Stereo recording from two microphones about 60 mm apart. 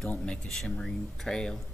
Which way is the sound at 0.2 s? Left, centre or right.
Centre.